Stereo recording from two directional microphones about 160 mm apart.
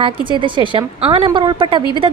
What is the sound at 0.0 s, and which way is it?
A woman's voice, 30° right (ahead or behind).